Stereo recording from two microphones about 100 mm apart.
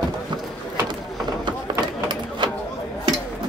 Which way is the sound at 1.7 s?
50° right (ahead or behind).